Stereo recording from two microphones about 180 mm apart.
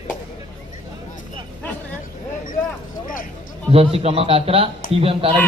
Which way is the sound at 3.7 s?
35° right (ahead or behind).